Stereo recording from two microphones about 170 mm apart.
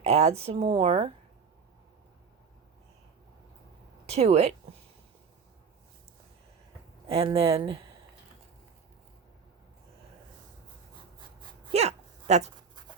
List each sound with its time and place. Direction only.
0.0 s speech: 40° right (ahead or behind)
4.1 s speech: 35° right (ahead or behind)
7.1 s speech: 35° right (ahead or behind)
11.7 s a sound: 40° right (ahead or behind)